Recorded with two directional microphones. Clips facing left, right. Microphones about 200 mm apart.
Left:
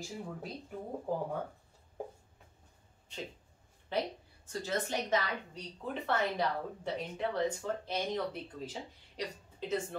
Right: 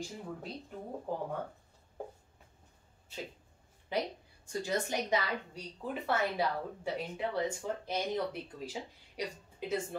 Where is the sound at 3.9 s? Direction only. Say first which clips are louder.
Even; 10° right (ahead or behind).